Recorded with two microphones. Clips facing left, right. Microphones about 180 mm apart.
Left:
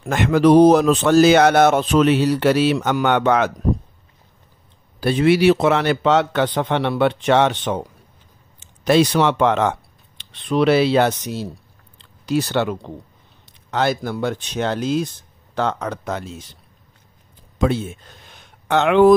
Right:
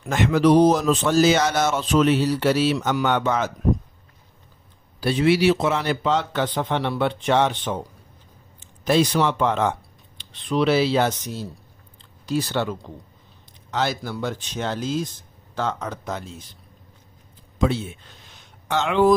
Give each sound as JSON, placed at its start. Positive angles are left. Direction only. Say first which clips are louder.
{"t": 0.0, "sound": "speech", "louder": "left 3 dB", "side_deg": 55}
{"t": 5.0, "sound": "a man's voice", "louder": "left 4 dB", "side_deg": 55}
{"t": 13.7, "sound": "a man's voice", "louder": "left 5 dB", "side_deg": 55}
{"t": 17.6, "sound": "speech", "louder": "left 3 dB", "side_deg": 50}